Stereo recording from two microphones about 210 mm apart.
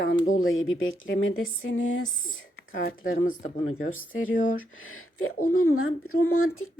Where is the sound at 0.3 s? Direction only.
70° left (ahead or behind).